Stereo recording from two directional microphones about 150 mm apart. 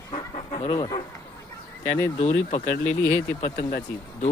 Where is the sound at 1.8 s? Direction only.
50° left (ahead or behind).